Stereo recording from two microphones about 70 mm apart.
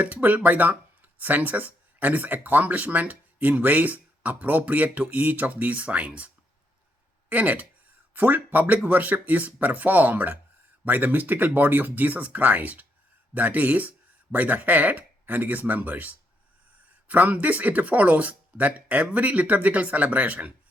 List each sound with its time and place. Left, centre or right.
0.0 s speech: right